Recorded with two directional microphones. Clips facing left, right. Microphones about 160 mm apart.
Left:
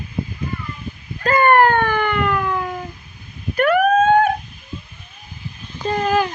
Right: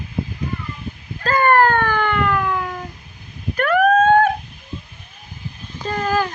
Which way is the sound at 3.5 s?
10° left (ahead or behind).